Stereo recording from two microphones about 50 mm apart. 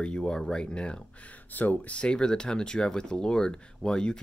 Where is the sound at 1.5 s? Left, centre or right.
Left.